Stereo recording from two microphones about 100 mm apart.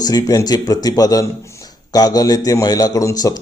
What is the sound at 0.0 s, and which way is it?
A man's voice, 40° left (ahead or behind).